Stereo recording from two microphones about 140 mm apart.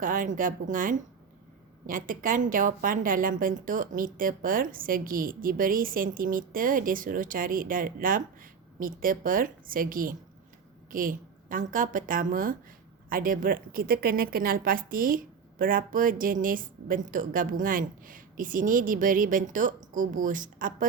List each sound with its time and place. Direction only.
0.0 s a woman's voice: 70° right (ahead or behind)
10.9 s a woman's voice: 75° right (ahead or behind)